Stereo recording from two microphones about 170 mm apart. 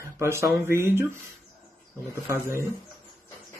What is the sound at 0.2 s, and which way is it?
Speech, 15° right (ahead or behind).